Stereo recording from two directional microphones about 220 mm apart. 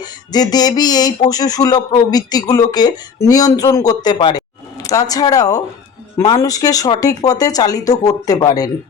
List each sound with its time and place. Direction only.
0.0 s speech: 20° left (ahead or behind)